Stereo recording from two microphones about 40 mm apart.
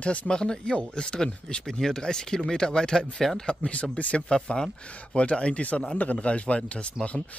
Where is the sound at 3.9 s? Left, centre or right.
Left.